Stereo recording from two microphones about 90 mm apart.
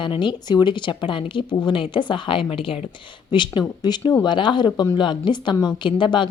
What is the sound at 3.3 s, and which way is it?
A woman's voice, 60° left (ahead or behind).